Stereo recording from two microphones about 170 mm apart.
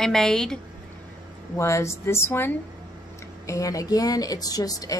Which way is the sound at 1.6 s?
15° left (ahead or behind).